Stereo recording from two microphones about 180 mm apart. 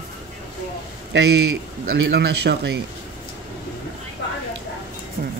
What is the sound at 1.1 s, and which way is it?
A man's voice, 70° right (ahead or behind).